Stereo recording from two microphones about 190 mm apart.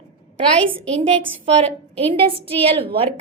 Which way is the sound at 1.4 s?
35° right (ahead or behind).